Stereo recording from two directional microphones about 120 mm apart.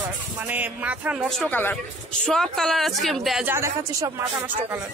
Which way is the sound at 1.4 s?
15° left (ahead or behind).